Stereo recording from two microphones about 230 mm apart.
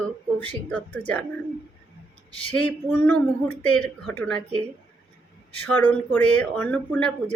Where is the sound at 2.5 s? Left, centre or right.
Centre.